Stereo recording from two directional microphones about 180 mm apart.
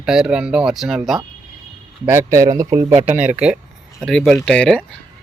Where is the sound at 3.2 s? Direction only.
5° right (ahead or behind).